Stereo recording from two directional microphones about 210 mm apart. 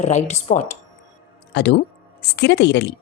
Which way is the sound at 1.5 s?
55° left (ahead or behind).